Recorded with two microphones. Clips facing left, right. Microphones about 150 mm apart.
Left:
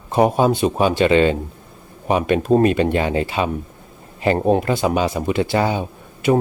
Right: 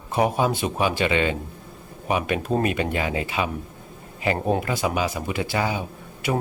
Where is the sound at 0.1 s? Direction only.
30° left (ahead or behind).